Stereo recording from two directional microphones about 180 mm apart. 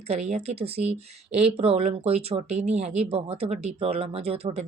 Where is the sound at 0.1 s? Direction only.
35° right (ahead or behind).